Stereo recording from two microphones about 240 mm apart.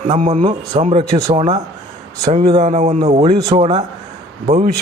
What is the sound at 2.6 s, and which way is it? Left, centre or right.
Speech, right.